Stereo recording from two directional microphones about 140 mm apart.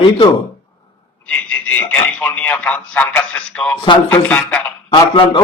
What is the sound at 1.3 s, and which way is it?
Speech, 10° left (ahead or behind).